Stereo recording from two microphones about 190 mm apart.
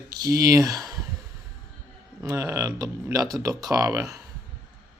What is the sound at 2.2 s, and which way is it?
Speech, 15° right (ahead or behind).